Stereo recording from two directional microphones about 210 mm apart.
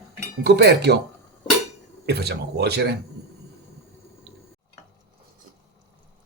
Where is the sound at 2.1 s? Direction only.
50° right (ahead or behind).